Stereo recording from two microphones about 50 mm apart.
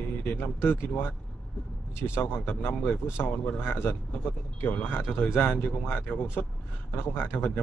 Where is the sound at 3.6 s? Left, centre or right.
Left.